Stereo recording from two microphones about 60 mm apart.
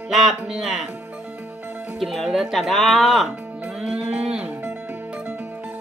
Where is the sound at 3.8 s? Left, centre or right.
Centre.